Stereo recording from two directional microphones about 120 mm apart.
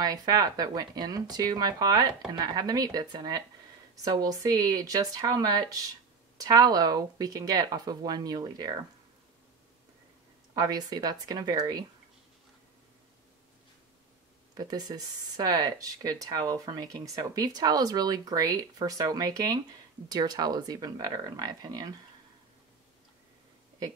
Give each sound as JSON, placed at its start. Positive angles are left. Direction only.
{"t": 0.0, "sound": "speech", "side_deg": -35}
{"t": 10.5, "sound": "speech", "side_deg": -30}
{"t": 14.5, "sound": "speech", "side_deg": -35}